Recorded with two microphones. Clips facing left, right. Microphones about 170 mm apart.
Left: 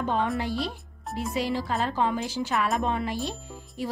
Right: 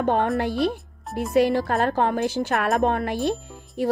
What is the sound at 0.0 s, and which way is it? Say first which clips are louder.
Speech: right 5 dB; 55° right (ahead or behind).